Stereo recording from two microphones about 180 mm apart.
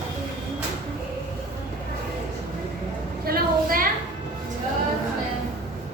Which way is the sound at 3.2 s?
55° right (ahead or behind).